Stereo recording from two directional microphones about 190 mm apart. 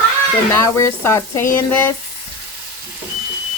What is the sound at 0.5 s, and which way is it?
Speech, 15° left (ahead or behind).